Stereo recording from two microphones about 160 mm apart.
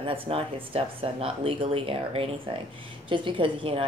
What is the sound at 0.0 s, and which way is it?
A woman's voice, 35° right (ahead or behind).